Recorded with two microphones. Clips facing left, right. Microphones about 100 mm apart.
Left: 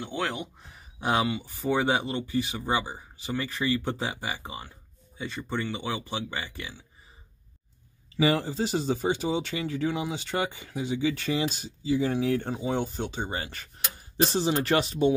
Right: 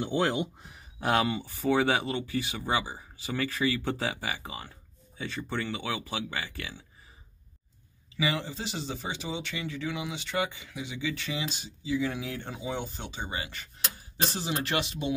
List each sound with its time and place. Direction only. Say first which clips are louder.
1.0 s speech: even; 5° left (ahead or behind)
1.7 s speech: even; 25° left (ahead or behind)
8.2 s speech: left 6 dB; 40° left (ahead or behind)